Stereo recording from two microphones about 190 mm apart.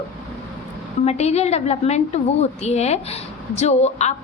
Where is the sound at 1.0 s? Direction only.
35° left (ahead or behind).